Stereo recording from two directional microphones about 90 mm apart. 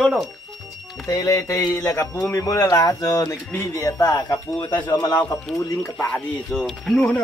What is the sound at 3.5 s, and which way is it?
Speech, 30° left (ahead or behind).